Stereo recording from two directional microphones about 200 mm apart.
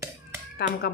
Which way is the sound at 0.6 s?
55° left (ahead or behind).